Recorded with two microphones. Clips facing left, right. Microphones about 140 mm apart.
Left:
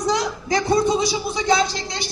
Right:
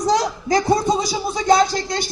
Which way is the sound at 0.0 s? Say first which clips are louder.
Right 3 dB; 40° right (ahead or behind).